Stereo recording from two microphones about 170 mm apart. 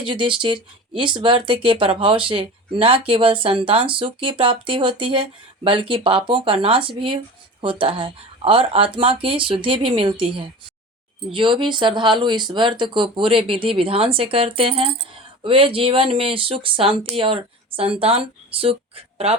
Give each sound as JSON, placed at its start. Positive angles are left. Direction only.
{"t": 0.0, "sound": "speech", "side_deg": -30}